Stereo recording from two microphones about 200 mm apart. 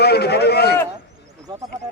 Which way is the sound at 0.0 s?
55° left (ahead or behind).